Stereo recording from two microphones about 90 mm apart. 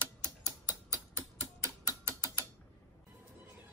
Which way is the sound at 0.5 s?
30° right (ahead or behind).